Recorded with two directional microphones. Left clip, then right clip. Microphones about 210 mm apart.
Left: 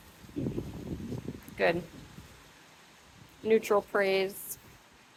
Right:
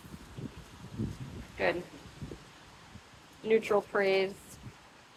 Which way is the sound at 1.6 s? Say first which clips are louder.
Left 3 dB; 45° left (ahead or behind).